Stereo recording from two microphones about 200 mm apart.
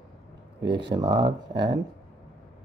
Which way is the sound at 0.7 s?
25° right (ahead or behind).